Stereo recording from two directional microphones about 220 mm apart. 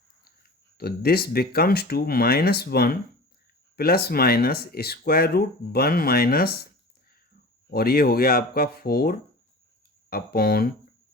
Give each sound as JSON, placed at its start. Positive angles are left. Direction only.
{"t": 0.3, "sound": "speech", "side_deg": 45}
{"t": 7.7, "sound": "speech", "side_deg": 45}